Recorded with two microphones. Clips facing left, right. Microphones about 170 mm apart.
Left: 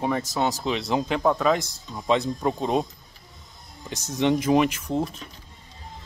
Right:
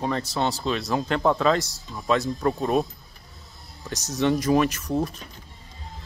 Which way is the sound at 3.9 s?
55° left (ahead or behind).